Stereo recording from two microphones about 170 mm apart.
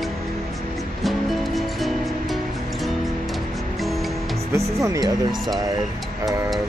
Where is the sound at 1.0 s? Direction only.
Centre (ahead or behind).